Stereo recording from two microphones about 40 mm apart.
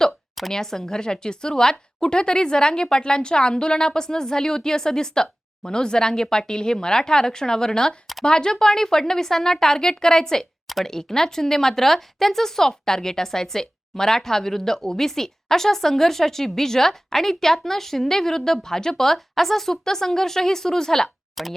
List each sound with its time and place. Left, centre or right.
0.5 s a woman's voice: centre
10.7 s speech: centre
10.9 s a woman's voice: centre
21.4 s speech: centre